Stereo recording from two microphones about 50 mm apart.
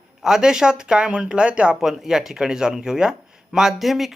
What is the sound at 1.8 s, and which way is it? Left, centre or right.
Speech, centre.